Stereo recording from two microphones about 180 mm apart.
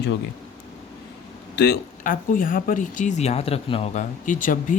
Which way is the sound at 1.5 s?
65° left (ahead or behind).